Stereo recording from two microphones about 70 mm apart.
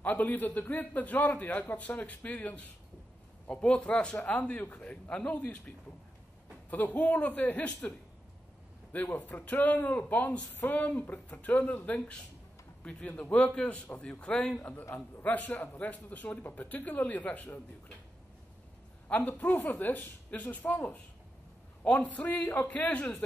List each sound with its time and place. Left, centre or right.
0.0 s speech: left
6.7 s speech: left
8.9 s a man's voice: left
14.6 s speech: left
19.0 s speech: left